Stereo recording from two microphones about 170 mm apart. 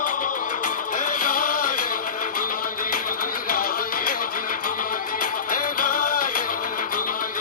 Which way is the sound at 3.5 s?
55° left (ahead or behind).